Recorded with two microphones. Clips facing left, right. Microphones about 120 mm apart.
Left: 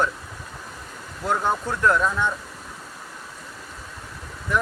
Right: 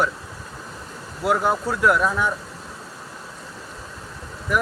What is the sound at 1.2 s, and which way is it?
Speech, 5° right (ahead or behind).